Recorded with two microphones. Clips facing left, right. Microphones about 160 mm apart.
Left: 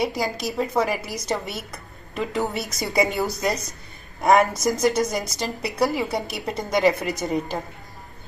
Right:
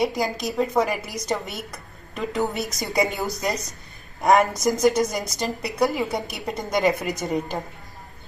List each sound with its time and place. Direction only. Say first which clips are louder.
0.0 s a woman's voice: right 1 dB; centre (ahead or behind)